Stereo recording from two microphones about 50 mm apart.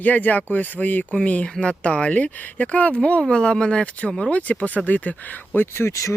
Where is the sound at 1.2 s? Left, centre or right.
Left.